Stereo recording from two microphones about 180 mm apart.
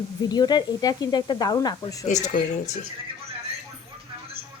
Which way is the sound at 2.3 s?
40° left (ahead or behind).